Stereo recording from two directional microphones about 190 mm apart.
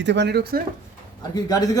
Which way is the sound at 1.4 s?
20° left (ahead or behind).